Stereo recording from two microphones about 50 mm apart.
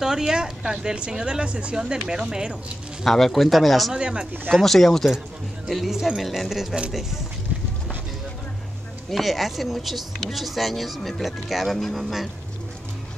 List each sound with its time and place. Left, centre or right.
0.0 s speech: centre
3.0 s speech: centre
3.9 s speech: centre
4.5 s speech: centre
9.1 s speech: centre